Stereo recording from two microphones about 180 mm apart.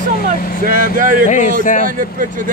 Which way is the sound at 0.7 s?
50° right (ahead or behind).